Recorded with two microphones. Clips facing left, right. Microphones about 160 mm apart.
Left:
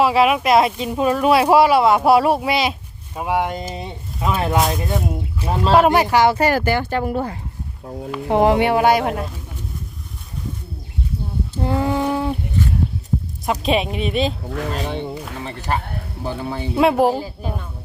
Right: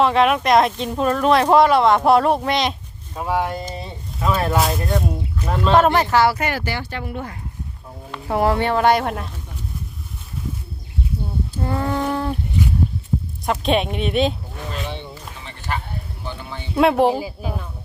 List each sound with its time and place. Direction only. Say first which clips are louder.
0.0 s speech: left 1 dB; 5° left (ahead or behind)
4.5 s speech: left 1 dB; centre (ahead or behind)
5.4 s speech: left 1 dB; 30° left (ahead or behind)
5.7 s speech: left 1 dB; 10° left (ahead or behind)
6.3 s speech: left 7 dB; 40° left (ahead or behind)
8.3 s speech: left 3 dB; 20° left (ahead or behind); by 9.3 s centre (ahead or behind)
11.5 s a sound: left 3 dB; 20° left (ahead or behind)
13.4 s speech: even; centre (ahead or behind)
14.7 s speech: left 2 dB; 45° left (ahead or behind)
15.4 s speech: left 3 dB; 35° left (ahead or behind)
16.7 s speech: even; centre (ahead or behind)
17.2 s a woman's voice: even; 10° right (ahead or behind)